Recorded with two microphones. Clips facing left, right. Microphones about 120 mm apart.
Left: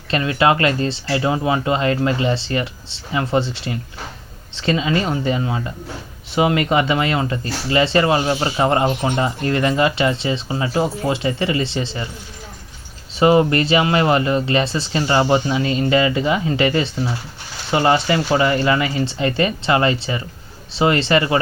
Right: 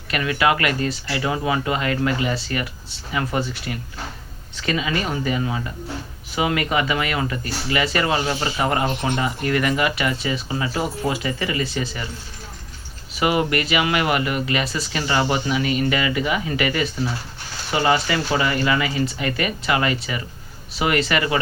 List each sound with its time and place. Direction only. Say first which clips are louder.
0.1 s speech: left 3 dB; 30° left (ahead or behind)
13.1 s speech: left 6 dB; 30° left (ahead or behind)